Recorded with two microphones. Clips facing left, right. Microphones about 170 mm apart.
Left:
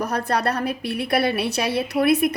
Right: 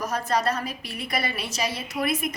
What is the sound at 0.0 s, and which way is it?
A woman's voice, 60° left (ahead or behind).